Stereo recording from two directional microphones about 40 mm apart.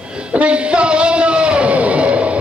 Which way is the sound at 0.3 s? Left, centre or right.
Right.